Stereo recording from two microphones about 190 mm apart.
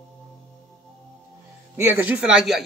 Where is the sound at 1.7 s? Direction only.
15° right (ahead or behind).